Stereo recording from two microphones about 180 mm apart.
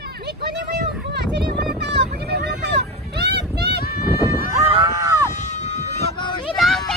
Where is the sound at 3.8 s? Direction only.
60° left (ahead or behind).